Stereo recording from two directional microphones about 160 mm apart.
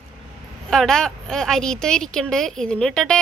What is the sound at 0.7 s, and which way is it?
A woman's voice, 5° left (ahead or behind).